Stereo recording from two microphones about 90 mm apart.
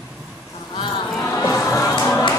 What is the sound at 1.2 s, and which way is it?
Music, 35° left (ahead or behind).